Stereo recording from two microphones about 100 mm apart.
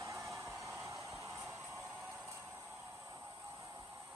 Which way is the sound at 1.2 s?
25° right (ahead or behind).